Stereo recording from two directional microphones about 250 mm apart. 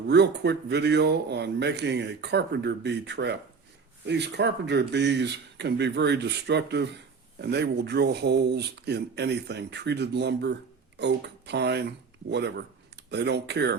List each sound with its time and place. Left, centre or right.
0.1 s speech: right